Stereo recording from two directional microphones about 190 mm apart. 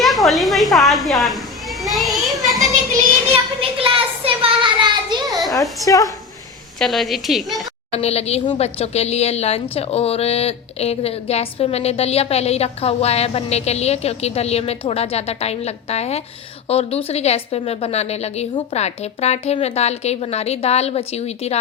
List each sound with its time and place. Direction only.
0.0 s a sound: centre (ahead or behind)
1.8 s children playing: centre (ahead or behind)
3.3 s child singing: 30° right (ahead or behind)
5.8 s a woman's voice: 15° left (ahead or behind)
6.7 s a woman's voice: centre (ahead or behind)
7.9 s a woman's voice: 35° left (ahead or behind)